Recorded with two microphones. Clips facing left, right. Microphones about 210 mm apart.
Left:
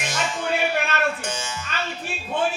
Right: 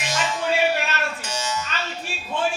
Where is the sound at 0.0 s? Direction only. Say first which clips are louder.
Right 1 dB; 55° left (ahead or behind).